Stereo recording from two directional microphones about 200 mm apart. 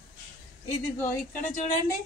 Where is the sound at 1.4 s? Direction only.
40° left (ahead or behind).